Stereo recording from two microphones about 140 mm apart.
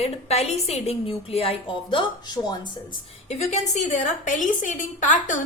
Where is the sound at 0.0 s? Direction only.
50° left (ahead or behind).